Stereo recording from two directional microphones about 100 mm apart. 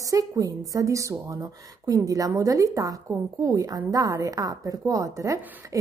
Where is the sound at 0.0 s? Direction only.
35° right (ahead or behind).